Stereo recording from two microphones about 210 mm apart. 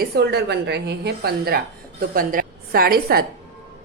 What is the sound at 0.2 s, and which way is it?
A woman's voice, 50° right (ahead or behind).